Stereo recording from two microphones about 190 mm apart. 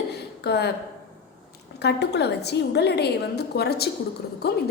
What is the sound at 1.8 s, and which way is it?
A woman's voice, 60° left (ahead or behind).